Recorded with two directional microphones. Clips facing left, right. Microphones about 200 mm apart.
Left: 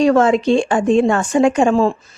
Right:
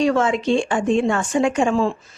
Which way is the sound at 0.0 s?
40° left (ahead or behind).